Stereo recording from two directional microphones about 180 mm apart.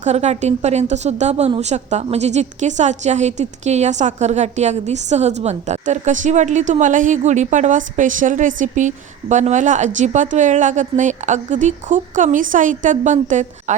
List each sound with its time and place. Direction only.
0.0 s a woman's voice: 40° right (ahead or behind)